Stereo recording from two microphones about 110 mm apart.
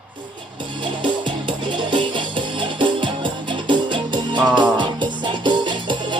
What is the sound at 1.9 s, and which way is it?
Music, 45° right (ahead or behind).